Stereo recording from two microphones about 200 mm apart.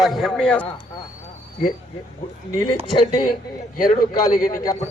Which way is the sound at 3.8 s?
20° left (ahead or behind).